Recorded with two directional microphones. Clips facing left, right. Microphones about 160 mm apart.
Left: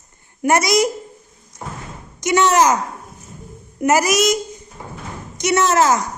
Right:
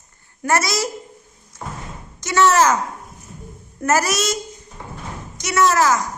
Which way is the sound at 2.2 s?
15° left (ahead or behind).